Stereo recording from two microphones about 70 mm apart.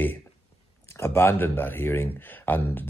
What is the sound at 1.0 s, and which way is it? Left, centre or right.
Speech, left.